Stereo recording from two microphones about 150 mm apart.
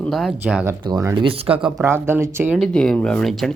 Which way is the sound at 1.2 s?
35° right (ahead or behind).